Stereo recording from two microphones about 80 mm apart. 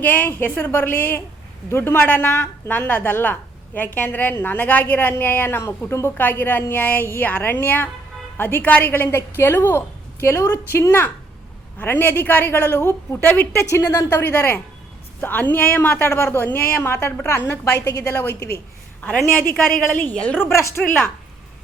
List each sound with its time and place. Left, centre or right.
0.0 s a woman's voice: left
13.7 s a woman's voice: left
14.1 s a woman's voice: left
17.7 s a woman's voice: left
19.2 s a woman's voice: left
20.4 s a woman's voice: left